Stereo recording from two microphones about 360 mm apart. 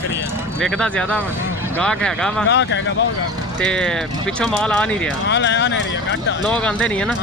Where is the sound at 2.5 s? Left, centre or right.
Left.